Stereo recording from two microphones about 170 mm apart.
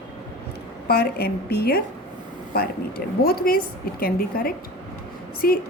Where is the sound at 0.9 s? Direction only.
65° left (ahead or behind).